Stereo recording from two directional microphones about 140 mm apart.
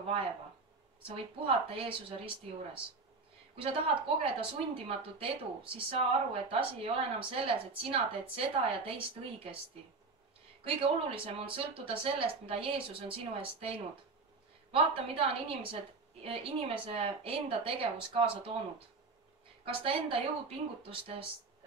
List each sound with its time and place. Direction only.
0.0 s speech: 40° right (ahead or behind)
4.2 s speech: 40° right (ahead or behind)
10.6 s speech: 40° right (ahead or behind)